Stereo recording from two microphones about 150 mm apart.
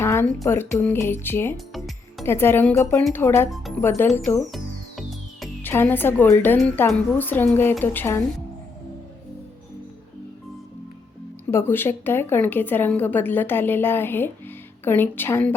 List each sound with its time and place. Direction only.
0.0 s a sound: 15° left (ahead or behind)
0.4 s a woman's voice: 15° left (ahead or behind)
1.5 s music: centre (ahead or behind)
2.2 s a woman's voice: 15° left (ahead or behind)
4.5 s music: centre (ahead or behind)
5.6 s a woman's voice: 15° left (ahead or behind)
11.5 s a woman's voice: 15° left (ahead or behind)